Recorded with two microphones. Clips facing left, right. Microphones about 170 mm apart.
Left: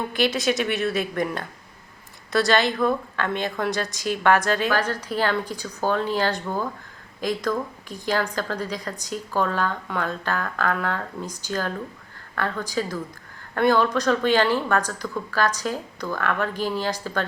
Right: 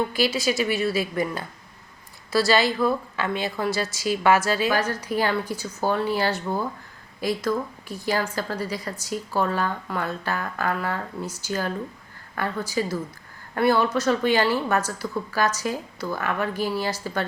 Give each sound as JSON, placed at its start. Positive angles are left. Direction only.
{"t": 0.1, "sound": "a woman's voice", "side_deg": 0}